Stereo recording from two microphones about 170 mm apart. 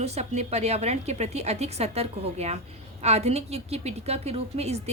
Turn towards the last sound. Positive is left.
turn(degrees=-40)  # may be behind; listen again after turning